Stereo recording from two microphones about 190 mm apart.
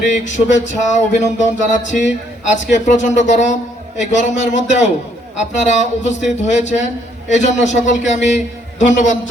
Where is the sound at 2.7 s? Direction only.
40° left (ahead or behind).